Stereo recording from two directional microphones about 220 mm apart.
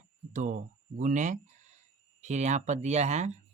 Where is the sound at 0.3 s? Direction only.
35° right (ahead or behind).